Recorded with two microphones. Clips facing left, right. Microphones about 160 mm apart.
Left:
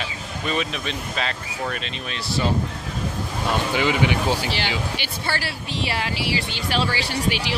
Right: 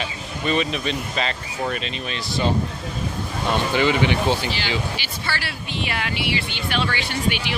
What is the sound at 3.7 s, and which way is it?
Speech, 10° left (ahead or behind).